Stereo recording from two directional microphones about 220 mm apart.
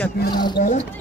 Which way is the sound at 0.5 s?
35° left (ahead or behind).